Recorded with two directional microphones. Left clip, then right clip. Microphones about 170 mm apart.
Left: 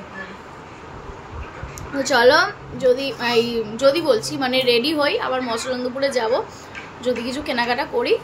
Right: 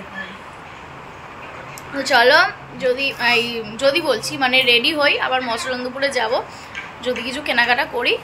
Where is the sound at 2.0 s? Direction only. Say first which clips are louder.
Right 2 dB; 25° left (ahead or behind).